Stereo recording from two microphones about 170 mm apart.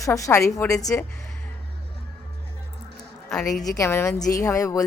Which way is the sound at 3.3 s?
Centre (ahead or behind).